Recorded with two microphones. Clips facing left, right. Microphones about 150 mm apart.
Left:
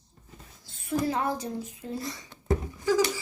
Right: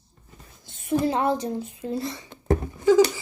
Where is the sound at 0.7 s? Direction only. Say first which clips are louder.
Right 5 dB; 20° right (ahead or behind).